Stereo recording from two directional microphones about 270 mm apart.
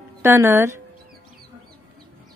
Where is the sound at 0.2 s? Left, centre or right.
Centre.